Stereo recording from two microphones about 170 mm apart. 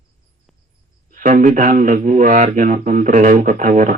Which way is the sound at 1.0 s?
50° right (ahead or behind).